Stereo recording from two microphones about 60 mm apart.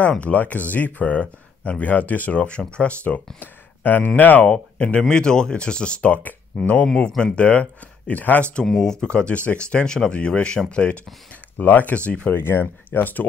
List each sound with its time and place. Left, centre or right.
0.2 s speech: left
3.3 s speech: left; by 6.1 s centre
6.1 s speech: left
7.1 s speech: centre
7.3 s speech: left
8.6 s speech: centre
12.3 s speech: left